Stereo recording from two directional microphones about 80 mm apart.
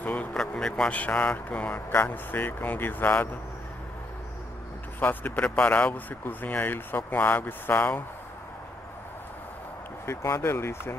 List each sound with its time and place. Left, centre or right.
0.0 s a sound: centre
0.9 s speech: centre
5.0 s speech: left
10.0 s speech: left